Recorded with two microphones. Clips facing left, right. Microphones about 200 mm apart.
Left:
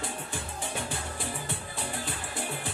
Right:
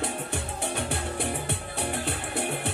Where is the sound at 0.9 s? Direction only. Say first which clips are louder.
Right 6 dB; 65° right (ahead or behind).